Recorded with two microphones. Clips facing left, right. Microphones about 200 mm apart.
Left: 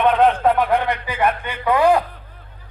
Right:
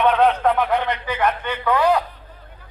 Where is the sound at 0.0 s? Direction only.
10° left (ahead or behind).